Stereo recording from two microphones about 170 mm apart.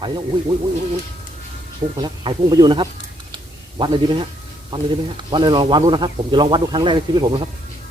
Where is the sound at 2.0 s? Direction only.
25° right (ahead or behind).